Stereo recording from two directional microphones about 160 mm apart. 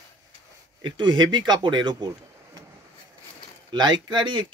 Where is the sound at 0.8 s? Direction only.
30° right (ahead or behind).